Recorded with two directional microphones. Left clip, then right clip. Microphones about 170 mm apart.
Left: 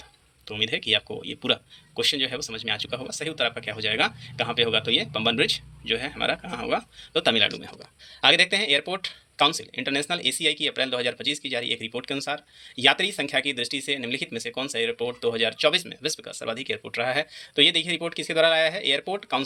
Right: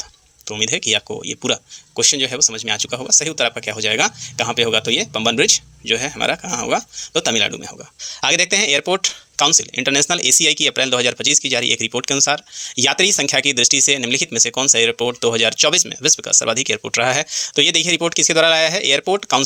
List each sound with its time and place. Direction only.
0.4 s speech: 40° right (ahead or behind)